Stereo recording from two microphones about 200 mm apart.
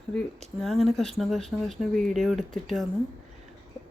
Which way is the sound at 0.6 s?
Centre (ahead or behind).